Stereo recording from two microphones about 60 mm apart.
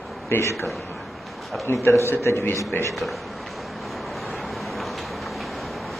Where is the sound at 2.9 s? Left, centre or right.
Centre.